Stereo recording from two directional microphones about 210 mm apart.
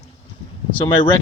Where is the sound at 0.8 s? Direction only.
25° left (ahead or behind).